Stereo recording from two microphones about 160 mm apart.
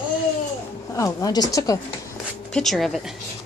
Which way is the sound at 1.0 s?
20° left (ahead or behind).